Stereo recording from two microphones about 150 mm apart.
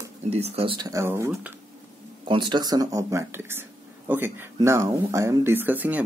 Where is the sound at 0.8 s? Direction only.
20° right (ahead or behind).